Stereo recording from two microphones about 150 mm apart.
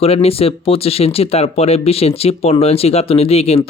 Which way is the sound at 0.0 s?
40° left (ahead or behind).